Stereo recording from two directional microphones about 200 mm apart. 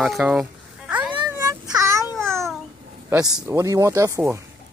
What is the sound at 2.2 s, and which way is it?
Babbling, 15° right (ahead or behind).